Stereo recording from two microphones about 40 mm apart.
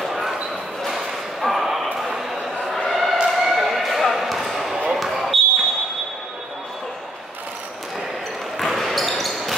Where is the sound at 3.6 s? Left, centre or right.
Centre.